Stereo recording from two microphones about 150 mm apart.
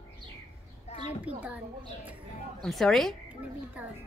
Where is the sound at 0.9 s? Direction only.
50° left (ahead or behind).